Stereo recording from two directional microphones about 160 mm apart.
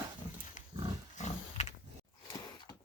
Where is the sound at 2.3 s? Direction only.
25° left (ahead or behind).